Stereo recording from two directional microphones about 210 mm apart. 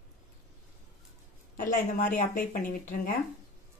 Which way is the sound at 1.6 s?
40° left (ahead or behind).